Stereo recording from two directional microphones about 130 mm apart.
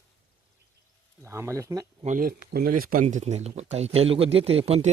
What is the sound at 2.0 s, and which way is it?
A man's voice, 80° right.